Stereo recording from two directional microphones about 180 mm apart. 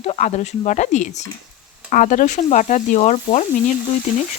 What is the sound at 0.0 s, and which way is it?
Speech, 40° left (ahead or behind).